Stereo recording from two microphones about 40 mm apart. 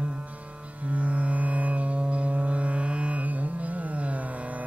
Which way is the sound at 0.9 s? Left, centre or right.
Right.